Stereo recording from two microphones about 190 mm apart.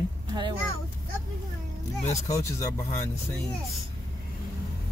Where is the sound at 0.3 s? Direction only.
25° right (ahead or behind).